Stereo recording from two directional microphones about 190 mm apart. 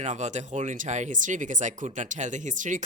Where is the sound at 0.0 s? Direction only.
35° right (ahead or behind).